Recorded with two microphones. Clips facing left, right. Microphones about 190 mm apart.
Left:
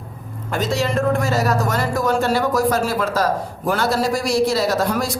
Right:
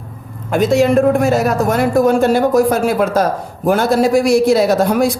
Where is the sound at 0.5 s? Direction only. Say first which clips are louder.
Right 9 dB; 55° right (ahead or behind).